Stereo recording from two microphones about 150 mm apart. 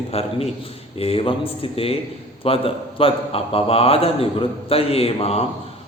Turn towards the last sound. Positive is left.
turn(degrees=40)  # may be behind; listen again after turning